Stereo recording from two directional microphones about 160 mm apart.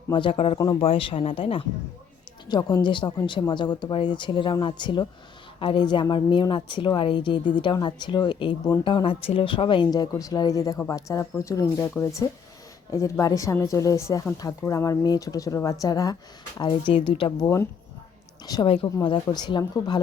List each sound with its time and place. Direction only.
0.1 s speech: 30° left (ahead or behind)